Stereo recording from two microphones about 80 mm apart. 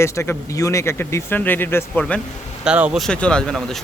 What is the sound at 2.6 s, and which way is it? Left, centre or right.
Speech, centre.